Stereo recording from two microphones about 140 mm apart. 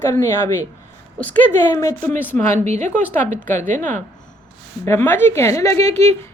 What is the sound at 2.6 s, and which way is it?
Speech, 55° right (ahead or behind).